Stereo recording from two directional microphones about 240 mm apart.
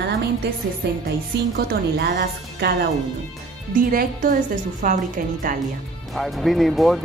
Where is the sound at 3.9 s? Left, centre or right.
Right.